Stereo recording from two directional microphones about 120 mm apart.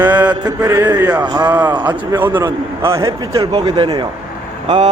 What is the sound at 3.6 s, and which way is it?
Speech, 40° right (ahead or behind).